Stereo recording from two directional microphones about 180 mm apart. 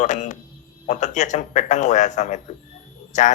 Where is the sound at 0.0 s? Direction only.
40° left (ahead or behind).